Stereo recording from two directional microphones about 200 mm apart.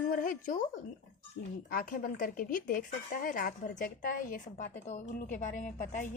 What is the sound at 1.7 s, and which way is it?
A woman's voice, 45° left (ahead or behind).